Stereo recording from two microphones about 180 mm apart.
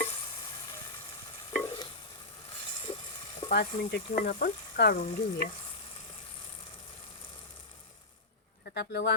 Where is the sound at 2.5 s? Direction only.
30° left (ahead or behind).